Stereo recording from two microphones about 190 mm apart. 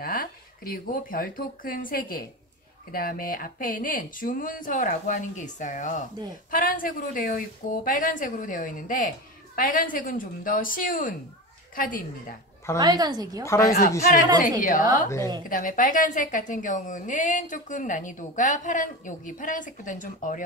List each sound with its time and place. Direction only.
0.0 s a woman's voice: 50° left (ahead or behind)
12.7 s a woman's voice: 20° right (ahead or behind)
13.5 s speech: 15° left (ahead or behind)
14.6 s a woman's voice: 45° left (ahead or behind)